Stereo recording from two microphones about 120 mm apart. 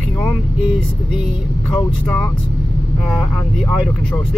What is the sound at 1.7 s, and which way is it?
Speech, 10° left (ahead or behind).